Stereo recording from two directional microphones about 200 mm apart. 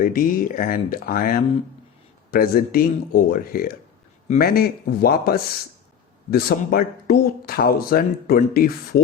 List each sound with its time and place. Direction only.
0.0 s speech: 45° left (ahead or behind)